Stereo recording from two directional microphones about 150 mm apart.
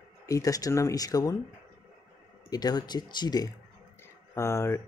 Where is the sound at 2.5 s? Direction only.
25° left (ahead or behind).